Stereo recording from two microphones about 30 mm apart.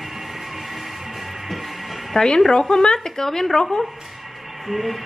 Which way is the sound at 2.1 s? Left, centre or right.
Centre.